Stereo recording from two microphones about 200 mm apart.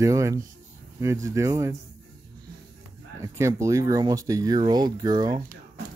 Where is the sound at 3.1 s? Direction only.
15° right (ahead or behind).